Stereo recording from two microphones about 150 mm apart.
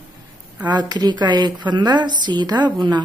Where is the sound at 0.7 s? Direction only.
30° right (ahead or behind).